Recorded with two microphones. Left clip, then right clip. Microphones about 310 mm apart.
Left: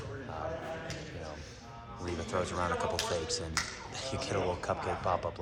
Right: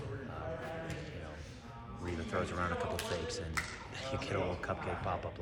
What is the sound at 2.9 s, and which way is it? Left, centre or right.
Speech, centre.